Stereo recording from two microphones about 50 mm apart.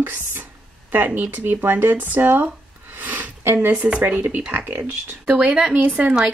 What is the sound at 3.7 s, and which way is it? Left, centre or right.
Speech, right.